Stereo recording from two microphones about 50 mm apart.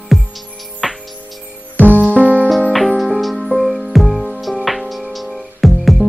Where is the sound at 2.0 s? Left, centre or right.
Right.